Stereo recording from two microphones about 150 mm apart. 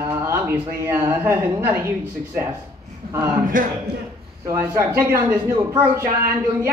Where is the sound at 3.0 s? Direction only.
90° right.